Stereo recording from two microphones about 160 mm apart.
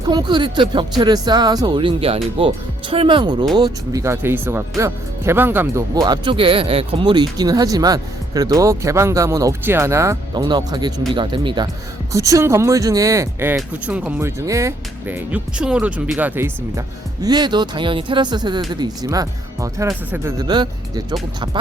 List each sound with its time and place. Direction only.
0.1 s speech: 25° right (ahead or behind)
17.2 s speech: 25° right (ahead or behind)
20.5 s speech: 25° right (ahead or behind)